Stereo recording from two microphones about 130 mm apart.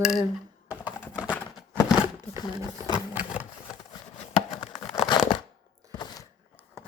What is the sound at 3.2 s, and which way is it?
Sewing machine, 10° right (ahead or behind).